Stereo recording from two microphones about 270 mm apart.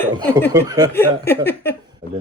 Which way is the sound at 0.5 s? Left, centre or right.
Centre.